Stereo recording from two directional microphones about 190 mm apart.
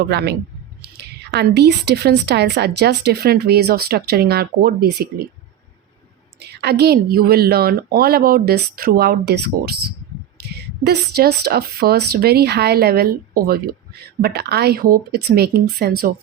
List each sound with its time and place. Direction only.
0.1 s a woman's voice: 60° right (ahead or behind)
6.4 s a woman's voice: 60° right (ahead or behind)